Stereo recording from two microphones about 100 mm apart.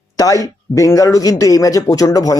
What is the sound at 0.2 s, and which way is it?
A man's voice, 35° left (ahead or behind).